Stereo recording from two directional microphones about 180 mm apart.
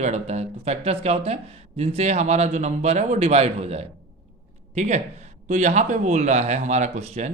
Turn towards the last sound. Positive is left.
turn(degrees=-40)  # may be behind; listen again after turning